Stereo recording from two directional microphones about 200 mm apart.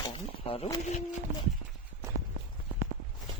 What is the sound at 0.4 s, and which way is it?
Speech, 30° left (ahead or behind).